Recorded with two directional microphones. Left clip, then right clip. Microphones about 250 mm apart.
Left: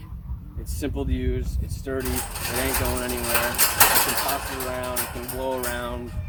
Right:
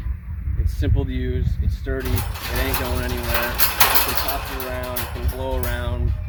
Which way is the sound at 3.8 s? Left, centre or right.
Centre.